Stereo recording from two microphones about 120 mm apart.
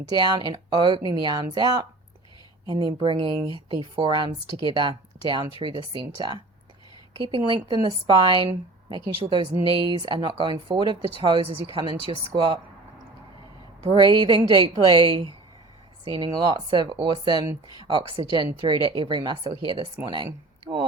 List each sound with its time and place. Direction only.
0.1 s a woman's voice: 40° right (ahead or behind)
13.8 s a woman's voice: 40° right (ahead or behind)